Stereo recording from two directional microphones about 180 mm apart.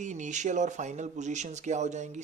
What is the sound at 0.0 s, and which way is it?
Speech, 45° right (ahead or behind).